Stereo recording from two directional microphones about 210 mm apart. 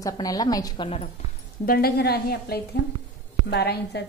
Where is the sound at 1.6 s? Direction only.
45° left (ahead or behind).